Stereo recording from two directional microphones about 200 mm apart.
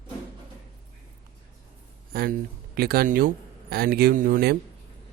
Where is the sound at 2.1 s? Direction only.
50° right (ahead or behind).